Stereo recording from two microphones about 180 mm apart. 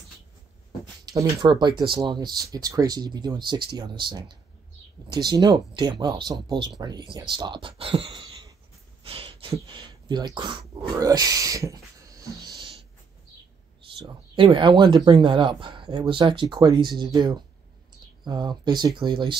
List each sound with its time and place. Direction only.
1.0 s speech: 20° right (ahead or behind)
9.0 s dog: 30° right (ahead or behind)
14.0 s speech: 30° right (ahead or behind)